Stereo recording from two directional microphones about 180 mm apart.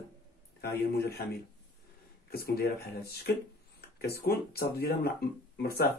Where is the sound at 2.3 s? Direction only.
60° left (ahead or behind).